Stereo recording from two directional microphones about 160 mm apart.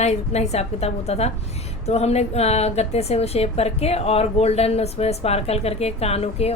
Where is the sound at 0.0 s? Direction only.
45° left (ahead or behind).